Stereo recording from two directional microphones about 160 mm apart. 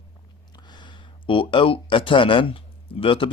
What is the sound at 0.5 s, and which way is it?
Speech, 30° left (ahead or behind).